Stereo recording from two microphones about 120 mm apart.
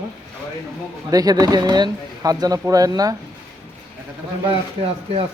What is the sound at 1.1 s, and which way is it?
Speech, 30° right (ahead or behind).